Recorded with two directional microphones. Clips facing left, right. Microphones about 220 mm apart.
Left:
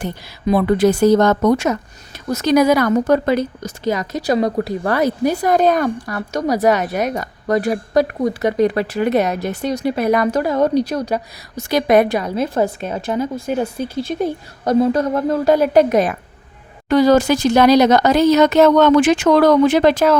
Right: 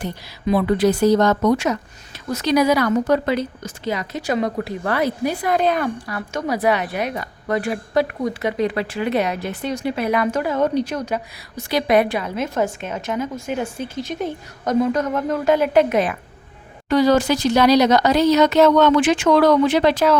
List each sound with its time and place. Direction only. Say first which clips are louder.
0.0 s a woman's voice: left 3 dB; 50° left (ahead or behind)